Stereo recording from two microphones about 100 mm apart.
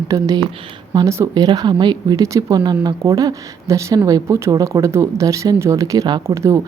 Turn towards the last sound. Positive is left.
turn(degrees=-30)  # may be behind; listen again after turning